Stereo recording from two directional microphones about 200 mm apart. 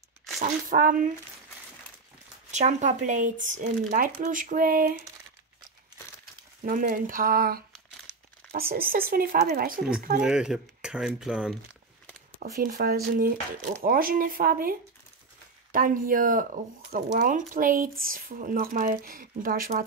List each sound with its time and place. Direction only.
0.4 s speech: 45° right (ahead or behind)
2.5 s speech: 35° right (ahead or behind)
6.6 s speech: 40° right (ahead or behind)
10.2 s speech: 5° right (ahead or behind)
12.4 s speech: 45° right (ahead or behind)